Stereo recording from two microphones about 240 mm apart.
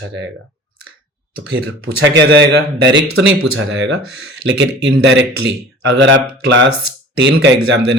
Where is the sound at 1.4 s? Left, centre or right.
Right.